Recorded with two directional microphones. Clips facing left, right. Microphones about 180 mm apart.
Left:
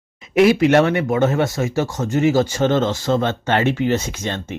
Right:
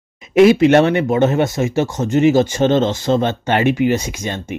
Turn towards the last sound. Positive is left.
turn(degrees=-10)  # may be behind; listen again after turning